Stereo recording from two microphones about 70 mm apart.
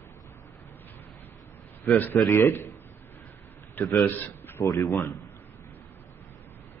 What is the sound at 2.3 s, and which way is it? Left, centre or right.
Speech, left.